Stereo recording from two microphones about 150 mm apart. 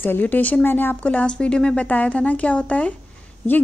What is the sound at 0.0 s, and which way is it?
A woman's voice, 10° left (ahead or behind).